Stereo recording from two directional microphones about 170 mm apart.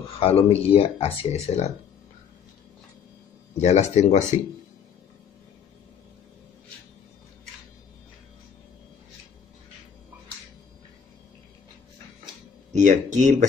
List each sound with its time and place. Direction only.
0.2 s speech: 35° left (ahead or behind)
3.6 s speech: 40° left (ahead or behind)
12.7 s speech: 45° right (ahead or behind)